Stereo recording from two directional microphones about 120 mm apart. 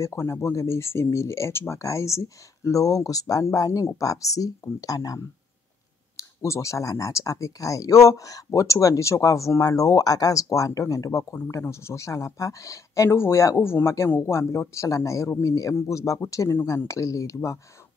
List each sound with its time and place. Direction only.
0.0 s speech: 25° left (ahead or behind)